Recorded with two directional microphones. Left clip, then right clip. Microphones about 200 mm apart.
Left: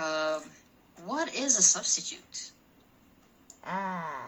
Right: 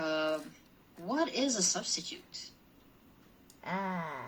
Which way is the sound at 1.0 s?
20° right (ahead or behind).